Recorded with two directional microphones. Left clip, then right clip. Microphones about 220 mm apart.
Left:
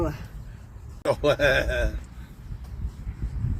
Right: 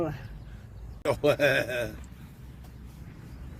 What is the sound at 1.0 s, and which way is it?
Speech, 20° right (ahead or behind).